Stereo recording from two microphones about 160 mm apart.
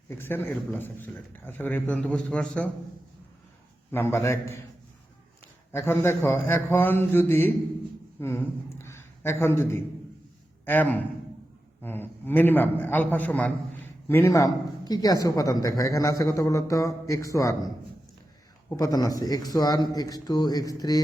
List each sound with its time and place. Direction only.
0.1 s speech: 15° left (ahead or behind)
3.9 s speech: 15° left (ahead or behind)
5.7 s a man's voice: 15° left (ahead or behind)
18.7 s speech: 20° left (ahead or behind)